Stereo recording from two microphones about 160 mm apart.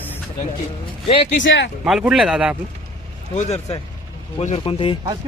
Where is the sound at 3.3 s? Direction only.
45° left (ahead or behind).